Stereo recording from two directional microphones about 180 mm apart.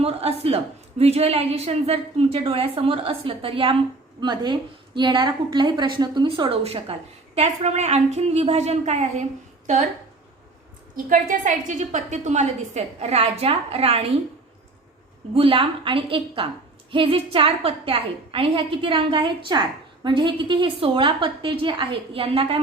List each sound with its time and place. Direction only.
0.0 s a woman's voice: 35° right (ahead or behind)
10.9 s a woman's voice: 45° right (ahead or behind)
15.4 s a woman's voice: 30° right (ahead or behind)